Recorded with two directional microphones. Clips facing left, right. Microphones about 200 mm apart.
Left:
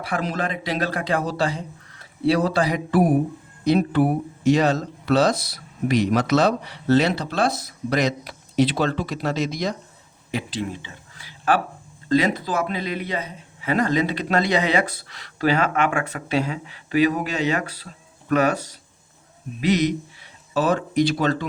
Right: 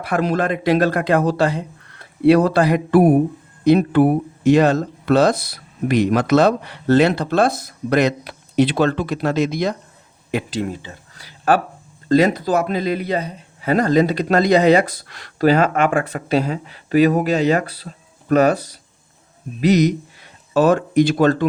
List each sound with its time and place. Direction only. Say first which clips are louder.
0.1 s speech: right 7 dB; 60° right (ahead or behind)
10.3 s a man's voice: right 5 dB; 45° right (ahead or behind)
19.6 s speech: right 5 dB; 40° right (ahead or behind)